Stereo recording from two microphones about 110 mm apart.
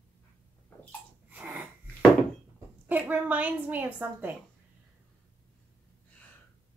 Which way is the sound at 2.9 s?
15° right (ahead or behind).